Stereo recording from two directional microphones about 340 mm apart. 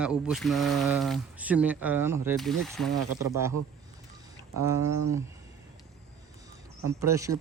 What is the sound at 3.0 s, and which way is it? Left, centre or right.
Speech, right.